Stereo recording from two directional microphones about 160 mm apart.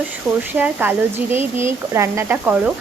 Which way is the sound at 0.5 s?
10° right (ahead or behind).